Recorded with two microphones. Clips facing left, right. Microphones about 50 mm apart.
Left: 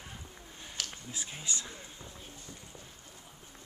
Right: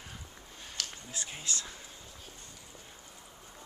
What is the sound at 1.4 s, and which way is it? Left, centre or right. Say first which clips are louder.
Speech: left 1 dB; centre.